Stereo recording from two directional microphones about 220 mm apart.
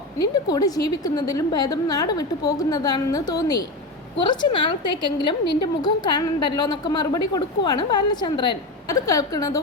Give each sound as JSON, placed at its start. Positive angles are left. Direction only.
{"t": 0.2, "sound": "a woman's voice", "side_deg": 15}